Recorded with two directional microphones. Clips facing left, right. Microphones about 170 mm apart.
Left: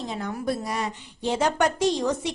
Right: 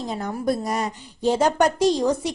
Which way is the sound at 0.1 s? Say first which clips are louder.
Right 5 dB; 40° right (ahead or behind).